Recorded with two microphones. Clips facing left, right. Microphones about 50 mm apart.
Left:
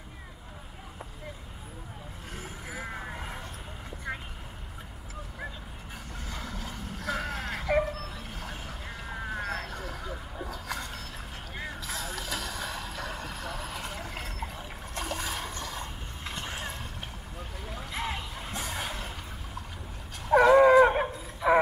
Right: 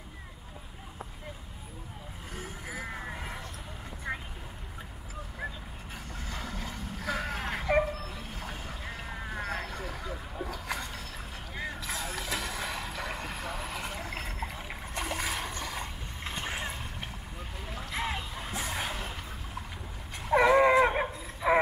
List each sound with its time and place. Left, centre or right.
2.3 s music: centre
6.2 s vehicle: centre
11.5 s music: centre
12.3 s a sound: right
13.1 s boat: centre
15.5 s mechanisms: centre
17.7 s a sound: centre
20.2 s livestock: centre
20.9 s a sound: centre